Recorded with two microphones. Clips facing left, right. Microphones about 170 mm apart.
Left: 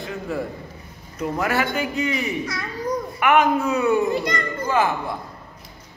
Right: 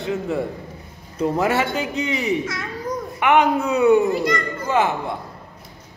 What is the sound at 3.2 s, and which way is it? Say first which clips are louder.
A man's voice: right 1 dB; 20° right (ahead or behind).